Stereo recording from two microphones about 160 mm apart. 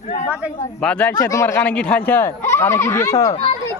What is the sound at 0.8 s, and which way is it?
Speech, 5° left (ahead or behind).